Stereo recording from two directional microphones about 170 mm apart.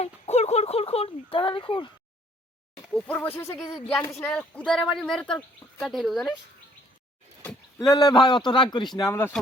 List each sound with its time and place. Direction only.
0.0 s speech: 40° left (ahead or behind)
2.9 s speech: 5° left (ahead or behind)
7.8 s speech: 25° left (ahead or behind)